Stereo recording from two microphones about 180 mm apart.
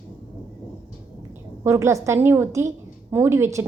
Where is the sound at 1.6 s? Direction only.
15° right (ahead or behind).